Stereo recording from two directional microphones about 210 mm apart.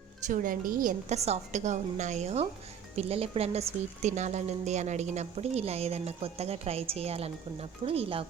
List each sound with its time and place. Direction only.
0.3 s a woman's voice: 40° right (ahead or behind)